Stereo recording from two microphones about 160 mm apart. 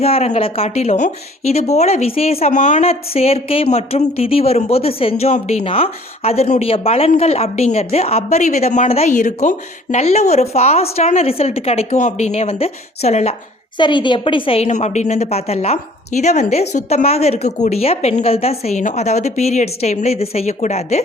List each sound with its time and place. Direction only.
0.0 s speech: 40° left (ahead or behind)
13.7 s speech: 30° left (ahead or behind); by 21.0 s 45° left (ahead or behind)